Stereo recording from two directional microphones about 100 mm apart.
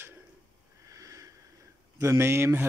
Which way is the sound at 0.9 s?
35° right (ahead or behind).